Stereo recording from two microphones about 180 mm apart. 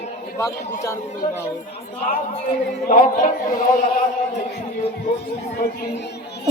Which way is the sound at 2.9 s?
45° left (ahead or behind).